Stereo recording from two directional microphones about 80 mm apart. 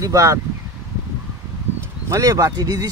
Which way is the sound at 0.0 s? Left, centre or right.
Right.